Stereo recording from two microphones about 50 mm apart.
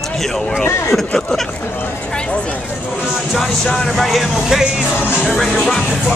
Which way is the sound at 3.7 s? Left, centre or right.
Centre.